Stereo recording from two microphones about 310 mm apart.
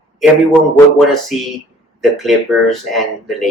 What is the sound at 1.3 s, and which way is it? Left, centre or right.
Speech, left.